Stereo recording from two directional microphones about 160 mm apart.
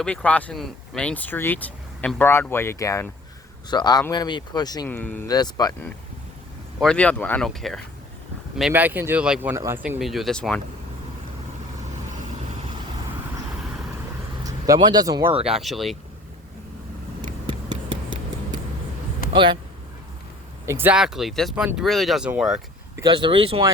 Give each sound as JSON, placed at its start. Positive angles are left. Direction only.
{"t": 0.0, "sound": "speech", "side_deg": 10}
{"t": 4.9, "sound": "speech", "side_deg": 10}
{"t": 5.3, "sound": "speech", "side_deg": 25}
{"t": 6.7, "sound": "speech", "side_deg": 5}
{"t": 8.7, "sound": "speech", "side_deg": -10}
{"t": 10.0, "sound": "speech", "side_deg": 0}
{"t": 14.4, "sound": "speech", "side_deg": -25}
{"t": 15.4, "sound": "speech", "side_deg": 0}
{"t": 17.4, "sound": "a sound", "side_deg": -25}
{"t": 19.3, "sound": "speech", "side_deg": -30}
{"t": 20.7, "sound": "speech", "side_deg": -15}
{"t": 23.0, "sound": "speech", "side_deg": -30}